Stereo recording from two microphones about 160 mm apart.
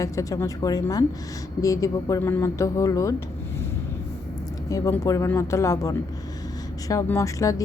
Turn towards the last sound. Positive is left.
turn(degrees=20)  # may be behind; listen again after turning